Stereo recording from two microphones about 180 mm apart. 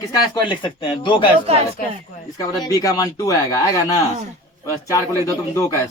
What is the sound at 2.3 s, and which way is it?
Speech, 20° left (ahead or behind).